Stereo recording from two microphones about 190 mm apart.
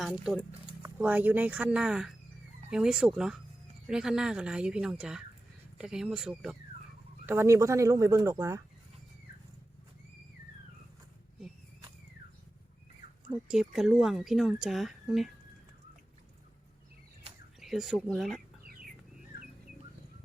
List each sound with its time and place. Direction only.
0.0 s speech: 5° right (ahead or behind)
7.3 s speech: 15° right (ahead or behind)
13.5 s speech: 5° right (ahead or behind)
17.6 s speech: centre (ahead or behind)